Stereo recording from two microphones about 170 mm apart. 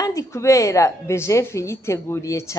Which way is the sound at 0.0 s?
20° left (ahead or behind).